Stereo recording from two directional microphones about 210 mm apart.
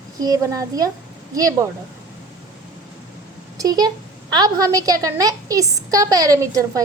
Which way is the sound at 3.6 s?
20° right (ahead or behind).